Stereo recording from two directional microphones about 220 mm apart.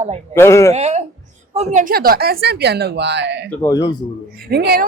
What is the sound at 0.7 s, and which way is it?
Speech, 30° right (ahead or behind).